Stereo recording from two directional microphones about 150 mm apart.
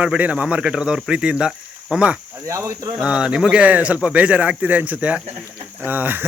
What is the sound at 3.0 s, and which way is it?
Speech, 5° right (ahead or behind).